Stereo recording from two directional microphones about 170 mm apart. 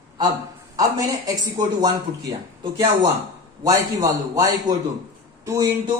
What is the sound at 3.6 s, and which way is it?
A man's voice, 20° right (ahead or behind).